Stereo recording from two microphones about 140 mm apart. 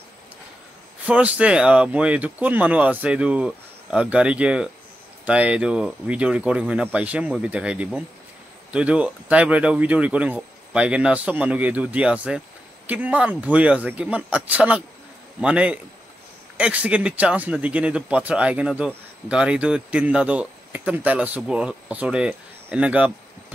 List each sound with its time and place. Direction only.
1.0 s speech: 10° right (ahead or behind)